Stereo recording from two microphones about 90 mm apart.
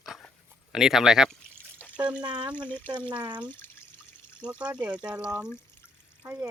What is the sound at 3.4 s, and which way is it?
Speech, 20° left (ahead or behind).